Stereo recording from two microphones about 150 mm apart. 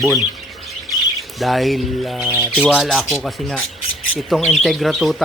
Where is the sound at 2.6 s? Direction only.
Centre (ahead or behind).